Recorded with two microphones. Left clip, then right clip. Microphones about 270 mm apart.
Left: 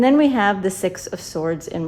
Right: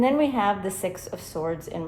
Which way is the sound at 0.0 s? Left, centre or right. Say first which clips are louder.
Left 6 dB; left.